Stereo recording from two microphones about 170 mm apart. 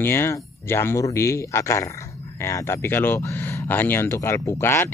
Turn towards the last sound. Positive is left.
turn(degrees=15)  # may be behind; listen again after turning